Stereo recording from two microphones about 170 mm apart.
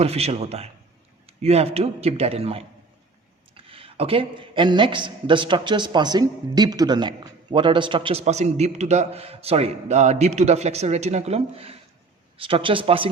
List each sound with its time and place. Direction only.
0.0 s a man's voice: 35° right (ahead or behind)
8.2 s a man's voice: 40° right (ahead or behind)